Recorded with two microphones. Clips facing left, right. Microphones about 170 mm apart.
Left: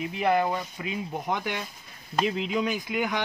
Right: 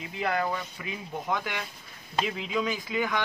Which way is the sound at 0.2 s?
20° left (ahead or behind).